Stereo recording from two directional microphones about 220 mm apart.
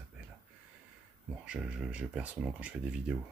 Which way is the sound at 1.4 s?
5° right (ahead or behind).